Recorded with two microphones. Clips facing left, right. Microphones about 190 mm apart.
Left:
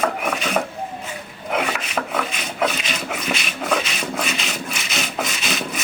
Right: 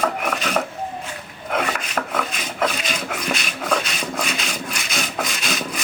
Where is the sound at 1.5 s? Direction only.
Centre (ahead or behind).